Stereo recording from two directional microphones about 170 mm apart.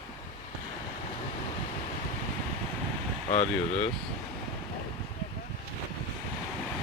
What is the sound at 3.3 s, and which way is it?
Speech, 40° left (ahead or behind).